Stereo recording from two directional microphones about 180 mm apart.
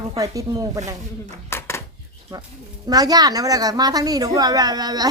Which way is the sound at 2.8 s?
20° right (ahead or behind).